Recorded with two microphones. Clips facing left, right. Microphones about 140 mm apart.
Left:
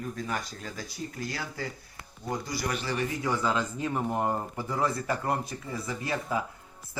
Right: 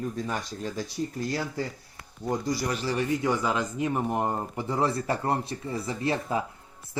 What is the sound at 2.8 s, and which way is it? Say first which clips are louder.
Speech: right 4 dB; 20° right (ahead or behind).